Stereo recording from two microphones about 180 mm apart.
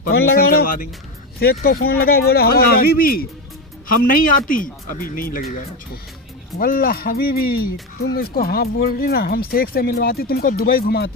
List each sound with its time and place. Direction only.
0.3 s speech: 60° left (ahead or behind)
6.6 s speech: 55° left (ahead or behind)